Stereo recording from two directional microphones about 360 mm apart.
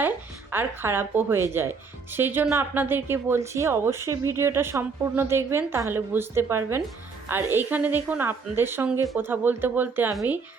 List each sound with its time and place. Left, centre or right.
0.5 s a woman's voice: centre